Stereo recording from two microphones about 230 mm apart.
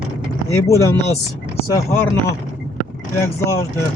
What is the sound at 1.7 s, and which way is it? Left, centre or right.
Speech, centre.